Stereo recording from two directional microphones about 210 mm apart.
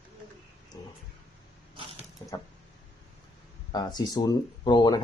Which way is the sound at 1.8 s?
25° right (ahead or behind).